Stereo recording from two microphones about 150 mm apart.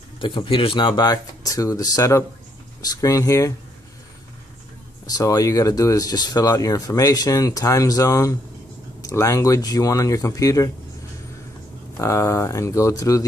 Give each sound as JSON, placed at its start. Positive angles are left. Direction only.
{"t": 0.2, "sound": "speech", "side_deg": 35}
{"t": 5.0, "sound": "speech", "side_deg": 20}
{"t": 12.0, "sound": "speech", "side_deg": 20}